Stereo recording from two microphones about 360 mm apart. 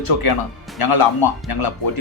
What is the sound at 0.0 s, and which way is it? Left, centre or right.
A man's voice, left.